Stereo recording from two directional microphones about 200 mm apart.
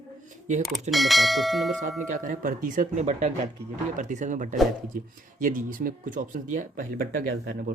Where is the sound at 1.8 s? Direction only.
40° right (ahead or behind).